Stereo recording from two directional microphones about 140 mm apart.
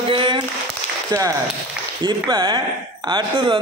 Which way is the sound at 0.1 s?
40° right (ahead or behind).